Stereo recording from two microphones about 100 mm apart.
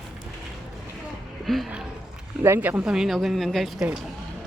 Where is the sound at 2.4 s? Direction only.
25° right (ahead or behind).